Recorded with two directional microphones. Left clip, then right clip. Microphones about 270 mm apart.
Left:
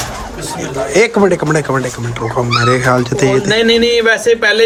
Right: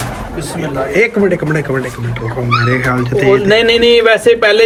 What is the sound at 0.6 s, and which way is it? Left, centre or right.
A man's voice, centre.